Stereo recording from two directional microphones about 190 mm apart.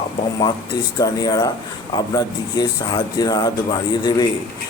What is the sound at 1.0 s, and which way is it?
Speech, 20° left (ahead or behind).